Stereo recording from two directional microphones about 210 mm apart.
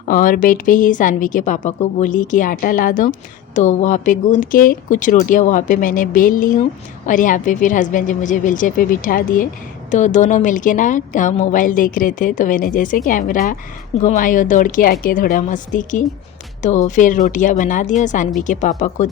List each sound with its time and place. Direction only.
0.0 s a woman's voice: 40° left (ahead or behind)